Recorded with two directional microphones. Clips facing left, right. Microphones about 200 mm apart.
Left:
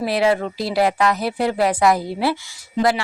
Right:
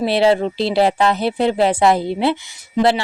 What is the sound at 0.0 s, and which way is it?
Speech, 30° right (ahead or behind).